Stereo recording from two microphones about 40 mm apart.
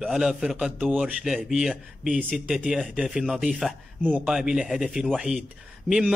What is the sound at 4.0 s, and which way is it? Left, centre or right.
Speech, right.